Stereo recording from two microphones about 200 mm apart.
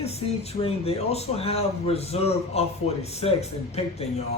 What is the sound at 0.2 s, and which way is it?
A man's voice, 30° left (ahead or behind).